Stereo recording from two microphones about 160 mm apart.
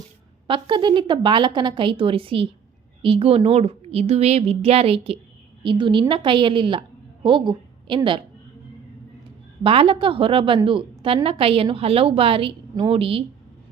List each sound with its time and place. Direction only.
0.4 s a woman's voice: 30° right (ahead or behind)
9.6 s a woman's voice: 35° right (ahead or behind)